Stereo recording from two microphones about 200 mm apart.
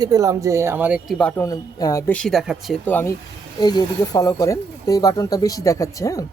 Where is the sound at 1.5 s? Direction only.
15° left (ahead or behind).